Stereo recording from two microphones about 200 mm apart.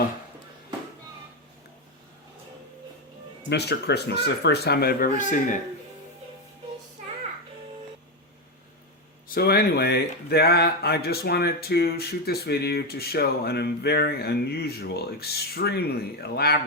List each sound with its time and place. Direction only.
3.5 s speech: 55° left (ahead or behind); by 5.5 s 40° left (ahead or behind)
9.3 s speech: 50° left (ahead or behind)